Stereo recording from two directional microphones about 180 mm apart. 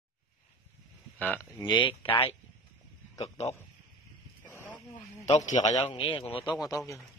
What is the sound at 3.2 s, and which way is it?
Speech, 35° left (ahead or behind).